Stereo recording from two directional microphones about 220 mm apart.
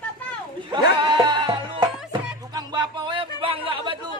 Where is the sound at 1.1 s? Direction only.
20° right (ahead or behind).